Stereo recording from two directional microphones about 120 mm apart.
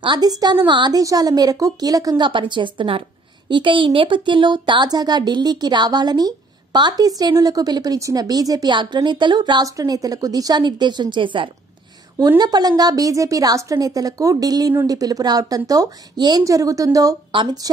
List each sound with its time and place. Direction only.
0.0 s speech: 35° right (ahead or behind)